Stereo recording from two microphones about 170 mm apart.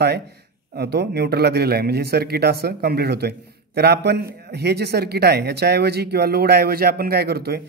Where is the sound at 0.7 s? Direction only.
75° right (ahead or behind).